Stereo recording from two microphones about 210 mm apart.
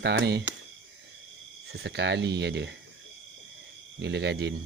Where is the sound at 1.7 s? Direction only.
50° right (ahead or behind).